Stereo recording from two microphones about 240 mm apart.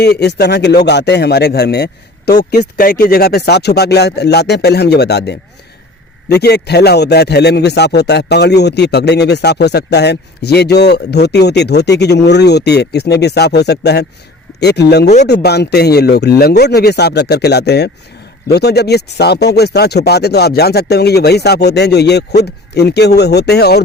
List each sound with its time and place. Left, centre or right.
0.0 s a man's voice: left